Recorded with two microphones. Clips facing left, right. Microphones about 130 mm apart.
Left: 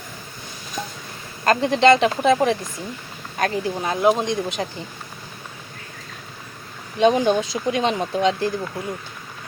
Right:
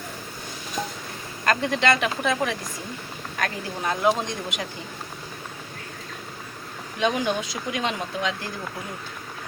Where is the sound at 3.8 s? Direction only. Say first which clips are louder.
Left 3 dB; 20° left (ahead or behind).